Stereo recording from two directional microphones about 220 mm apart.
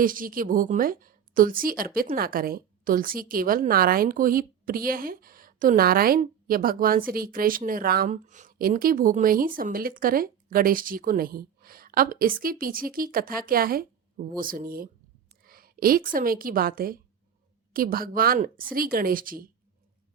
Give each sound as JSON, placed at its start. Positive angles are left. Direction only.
{"t": 0.0, "sound": "a woman's voice", "side_deg": -40}